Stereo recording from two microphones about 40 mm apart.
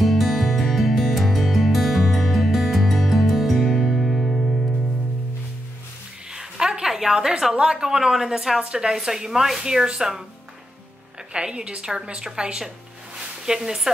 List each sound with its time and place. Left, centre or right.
0.0 s music: centre
6.3 s a sound: centre
7.5 s speech: centre
11.3 s a woman's voice: right
13.6 s speech: centre